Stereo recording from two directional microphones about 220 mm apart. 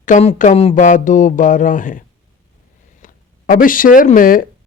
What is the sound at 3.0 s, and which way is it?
Speech, 40° left (ahead or behind).